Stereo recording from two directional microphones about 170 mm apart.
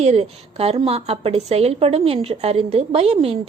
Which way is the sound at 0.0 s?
40° right (ahead or behind).